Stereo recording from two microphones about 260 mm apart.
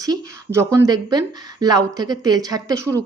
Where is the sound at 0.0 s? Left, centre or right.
Centre.